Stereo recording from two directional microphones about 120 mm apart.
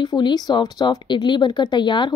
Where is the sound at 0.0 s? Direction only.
35° left (ahead or behind).